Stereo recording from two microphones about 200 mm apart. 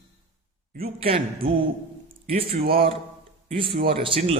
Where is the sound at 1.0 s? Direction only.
25° right (ahead or behind).